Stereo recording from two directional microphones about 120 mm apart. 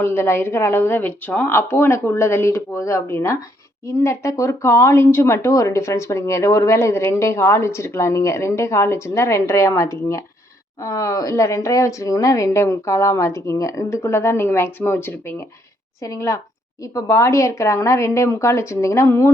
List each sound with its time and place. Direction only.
0.0 s speech: 20° left (ahead or behind)